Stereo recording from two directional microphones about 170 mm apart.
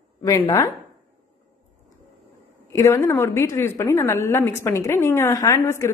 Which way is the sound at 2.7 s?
15° left (ahead or behind).